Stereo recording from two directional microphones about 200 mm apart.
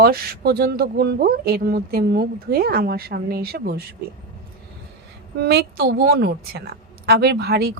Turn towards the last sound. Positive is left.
turn(degrees=-55)  # may be behind; listen again after turning